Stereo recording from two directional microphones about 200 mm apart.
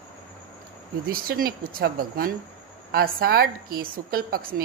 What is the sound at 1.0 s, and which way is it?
Speech, 45° right (ahead or behind).